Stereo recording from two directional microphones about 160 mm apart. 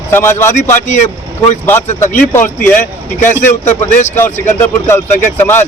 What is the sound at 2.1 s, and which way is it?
Speech, 15° left (ahead or behind).